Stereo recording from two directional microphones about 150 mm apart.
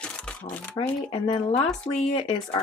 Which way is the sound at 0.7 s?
30° left (ahead or behind).